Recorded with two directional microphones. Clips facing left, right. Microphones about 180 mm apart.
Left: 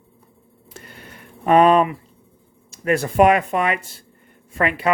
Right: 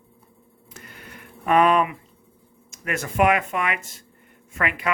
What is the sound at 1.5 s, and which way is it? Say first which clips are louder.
Speech: left 4 dB; 30° left (ahead or behind).